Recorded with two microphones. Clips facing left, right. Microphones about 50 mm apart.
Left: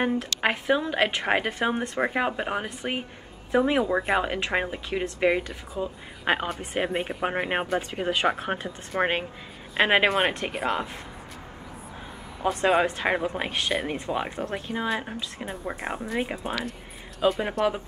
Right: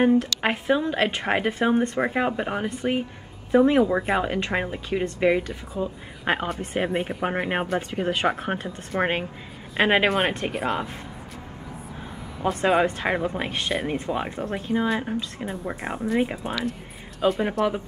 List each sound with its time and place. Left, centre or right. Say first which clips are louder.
0.0 s speech: right 5 dB; centre
12.4 s speech: right 1 dB; centre